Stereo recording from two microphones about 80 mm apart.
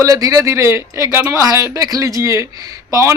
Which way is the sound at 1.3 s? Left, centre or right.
Right.